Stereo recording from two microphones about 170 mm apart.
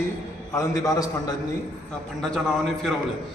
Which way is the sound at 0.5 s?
20° left (ahead or behind).